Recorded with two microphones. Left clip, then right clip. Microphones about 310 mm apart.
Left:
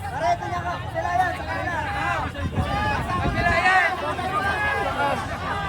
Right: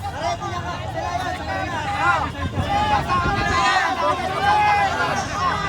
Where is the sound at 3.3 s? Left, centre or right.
Centre.